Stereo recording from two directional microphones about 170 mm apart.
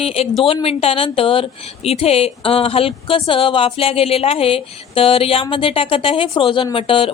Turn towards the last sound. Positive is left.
turn(degrees=30)  # may be behind; listen again after turning